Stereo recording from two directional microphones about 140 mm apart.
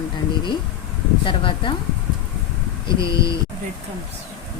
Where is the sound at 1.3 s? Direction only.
35° left (ahead or behind).